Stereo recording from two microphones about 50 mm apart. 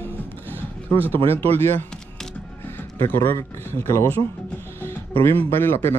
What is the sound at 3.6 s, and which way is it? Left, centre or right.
Speech, left.